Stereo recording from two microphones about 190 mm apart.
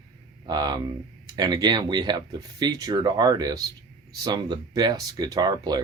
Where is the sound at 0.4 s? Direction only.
20° right (ahead or behind).